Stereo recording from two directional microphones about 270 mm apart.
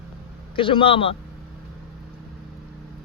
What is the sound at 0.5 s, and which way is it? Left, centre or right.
Speech, centre.